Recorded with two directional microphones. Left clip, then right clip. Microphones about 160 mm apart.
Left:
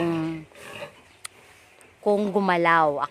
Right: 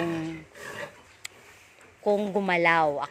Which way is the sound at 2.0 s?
40° left (ahead or behind).